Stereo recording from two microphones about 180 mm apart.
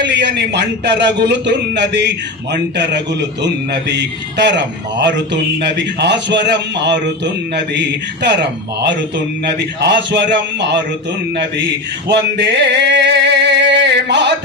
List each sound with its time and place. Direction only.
0.0 s a man's voice: 75° right (ahead or behind)